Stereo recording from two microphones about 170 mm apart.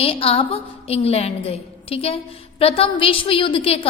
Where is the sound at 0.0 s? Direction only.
35° left (ahead or behind).